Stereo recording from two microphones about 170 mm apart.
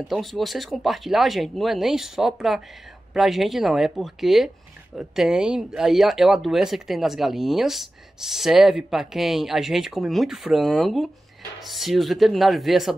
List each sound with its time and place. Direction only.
0.1 s speech: centre (ahead or behind)